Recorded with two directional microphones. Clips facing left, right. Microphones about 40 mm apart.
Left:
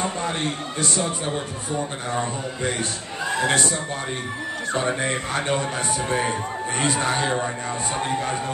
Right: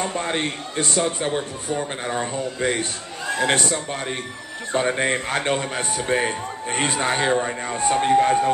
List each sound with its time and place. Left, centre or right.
0.1 s a man's voice: right
2.6 s a man's voice: right
4.7 s speech: centre
5.0 s a man's voice: right